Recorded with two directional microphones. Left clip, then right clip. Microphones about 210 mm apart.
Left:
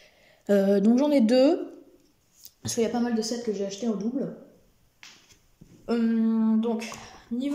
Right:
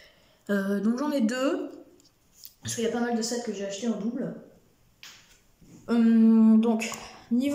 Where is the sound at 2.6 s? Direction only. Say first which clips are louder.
Left 6 dB; 25° left (ahead or behind).